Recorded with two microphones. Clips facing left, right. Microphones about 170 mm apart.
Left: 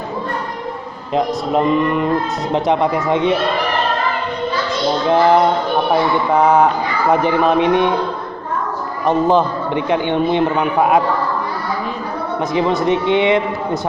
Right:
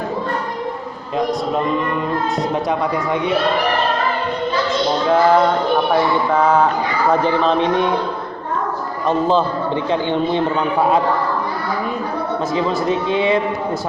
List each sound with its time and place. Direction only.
1.5 s speech: 20° left (ahead or behind)
5.0 s a man's voice: 20° left (ahead or behind)
9.0 s a man's voice: 15° left (ahead or behind)
12.8 s speech: 25° left (ahead or behind)